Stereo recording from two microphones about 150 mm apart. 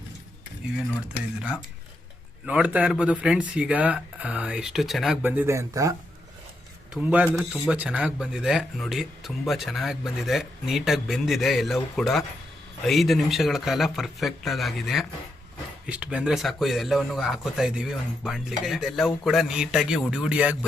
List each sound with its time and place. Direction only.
2.5 s speech: 10° right (ahead or behind)
5.2 s speech: 15° right (ahead or behind)
6.9 s speech: 10° right (ahead or behind)